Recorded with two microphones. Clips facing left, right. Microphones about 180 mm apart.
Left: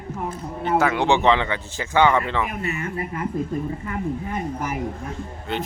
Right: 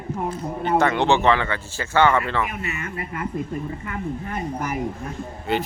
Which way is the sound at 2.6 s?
35° left (ahead or behind).